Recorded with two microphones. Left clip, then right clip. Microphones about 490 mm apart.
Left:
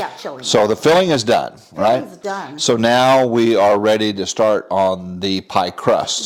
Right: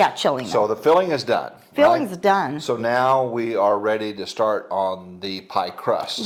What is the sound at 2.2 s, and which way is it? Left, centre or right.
Speech, right.